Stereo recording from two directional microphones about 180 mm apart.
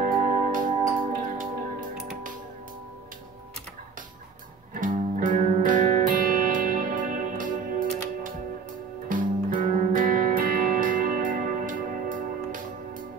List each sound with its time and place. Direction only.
0.5 s music: 50° right (ahead or behind)
4.7 s music: 50° right (ahead or behind)